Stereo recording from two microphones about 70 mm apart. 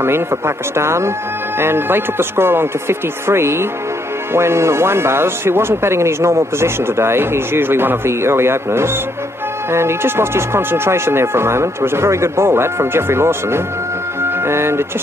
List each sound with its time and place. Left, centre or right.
0.7 s speech: right
14.2 s music: right